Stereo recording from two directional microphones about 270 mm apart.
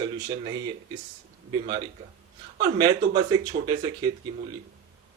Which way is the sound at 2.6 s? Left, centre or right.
Centre.